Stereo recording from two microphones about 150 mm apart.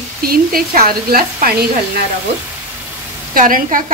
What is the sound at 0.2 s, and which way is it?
A woman's voice, 75° right (ahead or behind).